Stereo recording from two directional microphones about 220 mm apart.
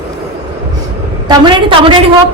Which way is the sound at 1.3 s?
20° right (ahead or behind).